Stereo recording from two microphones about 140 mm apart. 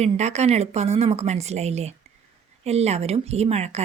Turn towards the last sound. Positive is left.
turn(degrees=-50)  # may be behind; listen again after turning